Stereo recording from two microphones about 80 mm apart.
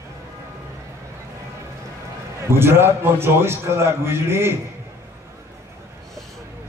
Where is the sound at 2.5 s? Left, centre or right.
Right.